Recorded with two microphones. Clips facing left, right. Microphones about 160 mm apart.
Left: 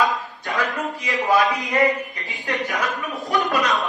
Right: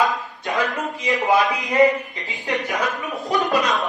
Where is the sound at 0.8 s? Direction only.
20° right (ahead or behind).